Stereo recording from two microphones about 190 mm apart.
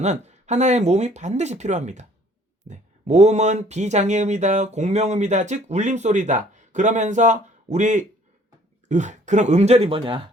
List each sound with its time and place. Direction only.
0.0 s speech: 35° right (ahead or behind)